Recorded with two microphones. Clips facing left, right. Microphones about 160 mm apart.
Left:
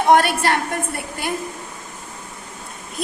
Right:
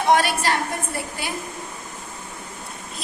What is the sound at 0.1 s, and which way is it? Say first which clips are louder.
A woman's voice: left 3 dB; 55° left (ahead or behind).